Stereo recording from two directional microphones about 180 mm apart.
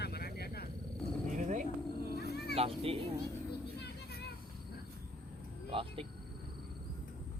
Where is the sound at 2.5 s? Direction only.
35° right (ahead or behind).